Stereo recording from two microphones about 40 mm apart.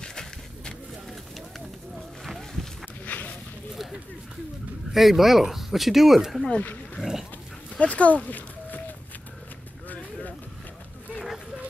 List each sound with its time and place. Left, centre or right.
0.0 s a sound: centre
2.8 s walk: left
4.9 s speech: centre
7.0 s dog: centre
7.8 s speech: left